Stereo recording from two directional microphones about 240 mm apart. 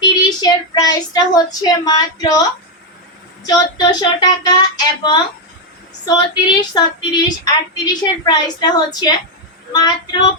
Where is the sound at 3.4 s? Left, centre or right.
Centre.